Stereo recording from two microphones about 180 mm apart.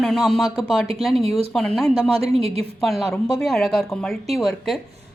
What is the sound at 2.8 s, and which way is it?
A woman's voice, centre (ahead or behind).